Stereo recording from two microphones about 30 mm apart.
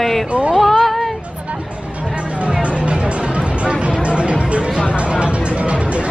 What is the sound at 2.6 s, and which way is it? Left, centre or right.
Music, right.